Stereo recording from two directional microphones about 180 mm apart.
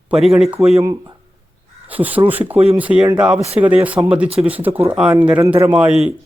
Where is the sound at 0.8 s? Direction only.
20° right (ahead or behind).